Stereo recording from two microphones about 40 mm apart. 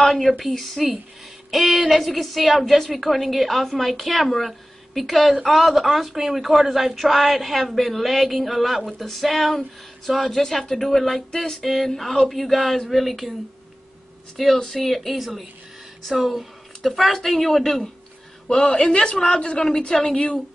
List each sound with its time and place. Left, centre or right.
0.0 s a woman's voice: centre
14.3 s a woman's voice: centre
18.6 s a woman's voice: left